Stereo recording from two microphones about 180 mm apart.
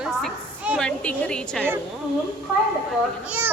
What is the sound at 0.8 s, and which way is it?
Speech, 5° left (ahead or behind).